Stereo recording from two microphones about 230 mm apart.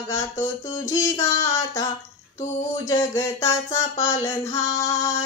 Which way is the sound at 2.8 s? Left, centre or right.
Centre.